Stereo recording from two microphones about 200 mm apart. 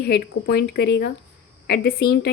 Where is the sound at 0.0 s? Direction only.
55° left (ahead or behind).